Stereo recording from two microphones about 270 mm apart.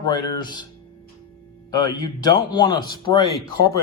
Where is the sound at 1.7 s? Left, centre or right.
Centre.